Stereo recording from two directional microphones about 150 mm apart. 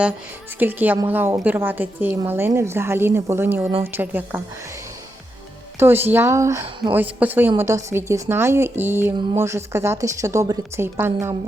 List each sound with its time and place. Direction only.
0.6 s a woman's voice: 10° right (ahead or behind)
5.8 s a woman's voice: 15° right (ahead or behind)